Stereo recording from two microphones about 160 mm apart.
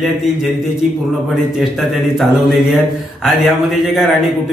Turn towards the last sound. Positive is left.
turn(degrees=0)  # may be behind; listen again after turning